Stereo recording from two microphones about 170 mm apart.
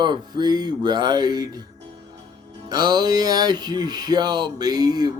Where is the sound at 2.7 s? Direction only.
25° right (ahead or behind).